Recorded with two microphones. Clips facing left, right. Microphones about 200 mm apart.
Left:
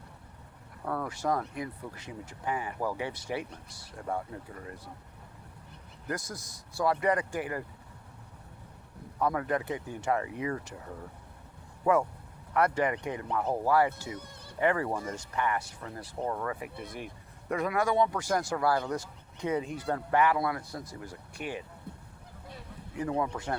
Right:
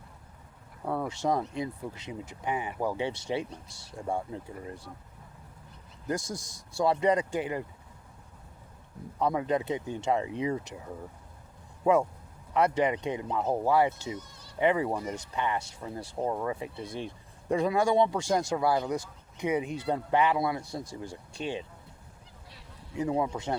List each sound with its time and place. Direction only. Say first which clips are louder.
0.9 s speech: right 2 dB; 20° right (ahead or behind)
6.1 s speech: right 4 dB; 25° right (ahead or behind)
6.3 s a man's voice: right 4 dB; 85° right
6.7 s speech: right 2 dB; 25° right (ahead or behind)
9.1 s speech: right 2 dB; 15° right (ahead or behind)
11.9 s speech: right 2 dB; 20° right (ahead or behind)
14.2 s a sound: even; 55° left (ahead or behind)
14.6 s speech: right 2 dB; 20° right (ahead or behind)
23.0 s speech: right 2 dB; 20° right (ahead or behind)